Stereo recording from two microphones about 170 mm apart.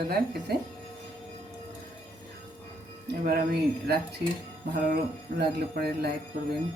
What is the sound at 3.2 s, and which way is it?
Speech, 55° right (ahead or behind).